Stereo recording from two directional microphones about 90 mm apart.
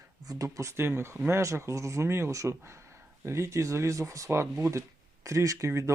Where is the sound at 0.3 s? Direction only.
40° right (ahead or behind).